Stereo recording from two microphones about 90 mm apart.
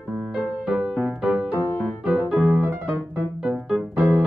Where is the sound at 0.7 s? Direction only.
15° right (ahead or behind).